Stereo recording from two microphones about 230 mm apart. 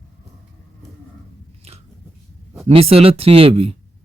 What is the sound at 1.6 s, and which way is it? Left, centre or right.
Biting, right.